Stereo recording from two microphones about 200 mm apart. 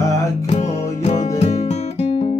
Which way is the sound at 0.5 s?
35° left (ahead or behind).